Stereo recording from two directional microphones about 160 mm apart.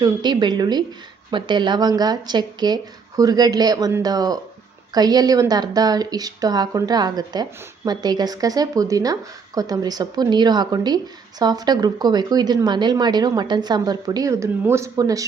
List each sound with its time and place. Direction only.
0.0 s a woman's voice: 30° right (ahead or behind)